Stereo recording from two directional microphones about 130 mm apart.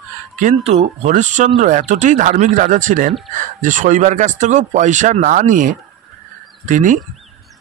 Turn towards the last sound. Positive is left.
turn(degrees=-80)